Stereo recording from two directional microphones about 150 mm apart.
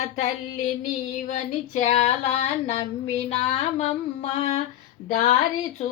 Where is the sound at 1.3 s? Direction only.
50° left (ahead or behind).